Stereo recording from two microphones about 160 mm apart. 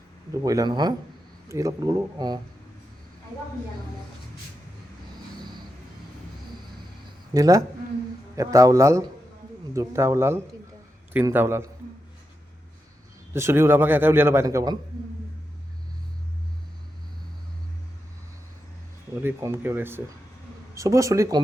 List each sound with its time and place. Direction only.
0.4 s speech: 25° right (ahead or behind)
7.3 s a man's voice: 20° right (ahead or behind)
13.3 s a man's voice: 15° right (ahead or behind)
19.2 s a man's voice: 15° right (ahead or behind)